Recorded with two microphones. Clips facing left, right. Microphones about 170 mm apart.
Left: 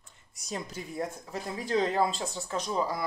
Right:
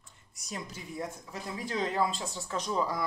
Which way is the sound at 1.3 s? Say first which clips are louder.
Left 7 dB; 35° left (ahead or behind).